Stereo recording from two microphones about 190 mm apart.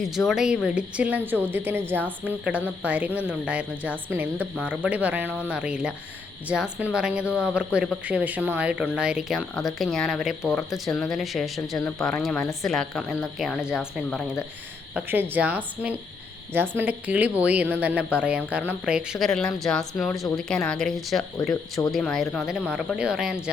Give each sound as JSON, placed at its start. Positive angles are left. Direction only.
{"t": 0.0, "sound": "speech", "side_deg": 0}
{"t": 21.5, "sound": "speech", "side_deg": 20}
{"t": 21.9, "sound": "speech", "side_deg": 0}